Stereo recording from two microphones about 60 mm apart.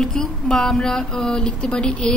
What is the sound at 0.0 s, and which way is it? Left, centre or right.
Speech, centre.